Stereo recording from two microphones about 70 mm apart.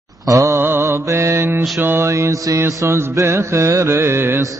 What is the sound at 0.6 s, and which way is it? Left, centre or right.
Mantra, right.